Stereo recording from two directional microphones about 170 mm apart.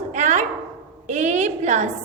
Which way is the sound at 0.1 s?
45° right (ahead or behind).